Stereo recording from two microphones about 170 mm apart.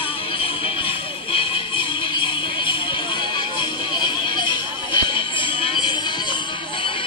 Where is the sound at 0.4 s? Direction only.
30° left (ahead or behind).